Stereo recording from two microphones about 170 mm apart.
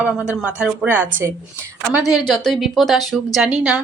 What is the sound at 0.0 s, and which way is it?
Speech, 5° right (ahead or behind).